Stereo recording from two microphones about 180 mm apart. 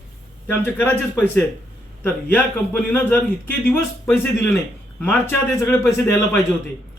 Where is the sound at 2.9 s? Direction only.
10° left (ahead or behind).